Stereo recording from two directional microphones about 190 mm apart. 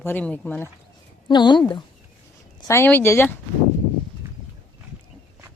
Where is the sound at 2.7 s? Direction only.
10° left (ahead or behind).